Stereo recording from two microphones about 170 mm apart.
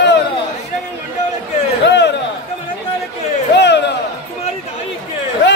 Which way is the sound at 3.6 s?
90° left.